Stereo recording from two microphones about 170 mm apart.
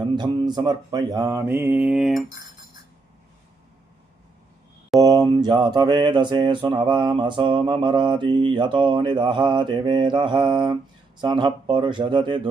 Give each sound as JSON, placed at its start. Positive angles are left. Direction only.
{"t": 0.2, "sound": "mantra", "side_deg": -25}
{"t": 4.9, "sound": "mantra", "side_deg": -20}